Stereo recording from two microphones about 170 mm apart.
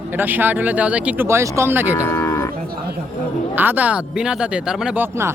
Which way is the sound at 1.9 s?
15° left (ahead or behind).